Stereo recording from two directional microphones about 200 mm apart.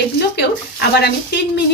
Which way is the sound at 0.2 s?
55° left (ahead or behind).